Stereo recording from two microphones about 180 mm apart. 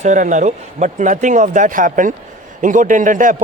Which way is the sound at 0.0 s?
45° right (ahead or behind).